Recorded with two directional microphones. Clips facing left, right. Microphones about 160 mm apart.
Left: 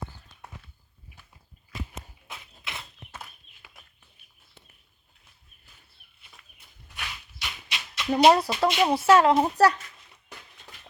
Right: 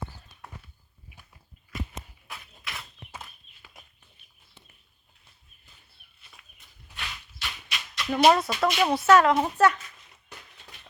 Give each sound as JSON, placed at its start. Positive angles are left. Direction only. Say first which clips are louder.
{"t": 2.2, "sound": "a sound", "louder": "even", "side_deg": 25}
{"t": 6.6, "sound": "horse", "louder": "even", "side_deg": 15}
{"t": 8.2, "sound": "a woman's voice", "louder": "left 1 dB", "side_deg": 30}